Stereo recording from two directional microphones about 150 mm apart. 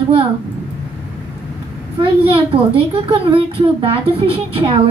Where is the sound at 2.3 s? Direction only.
40° right (ahead or behind).